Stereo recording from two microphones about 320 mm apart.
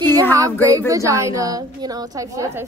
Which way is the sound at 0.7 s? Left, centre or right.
Centre.